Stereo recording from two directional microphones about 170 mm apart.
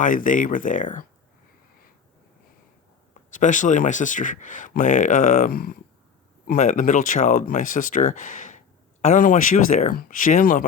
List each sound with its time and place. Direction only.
0.0 s speech: 50° left (ahead or behind)
3.3 s speech: 50° left (ahead or behind)
6.6 s speech: 45° left (ahead or behind)